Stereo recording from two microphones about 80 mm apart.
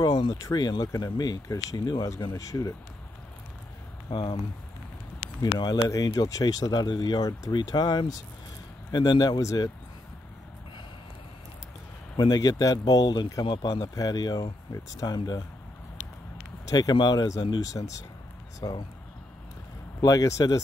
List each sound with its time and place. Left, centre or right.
0.0 s speech: left
0.3 s speech: left
4.1 s speech: left
5.4 s speech: left
9.4 s speech: left
12.2 s speech: left
13.5 s speech: left
13.9 s speech: left
16.7 s speech: left
18.6 s speech: left
20.0 s speech: left